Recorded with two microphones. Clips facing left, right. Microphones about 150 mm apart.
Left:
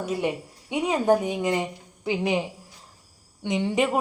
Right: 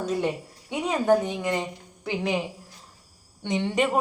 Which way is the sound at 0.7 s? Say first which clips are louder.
Left 1 dB; 15° left (ahead or behind).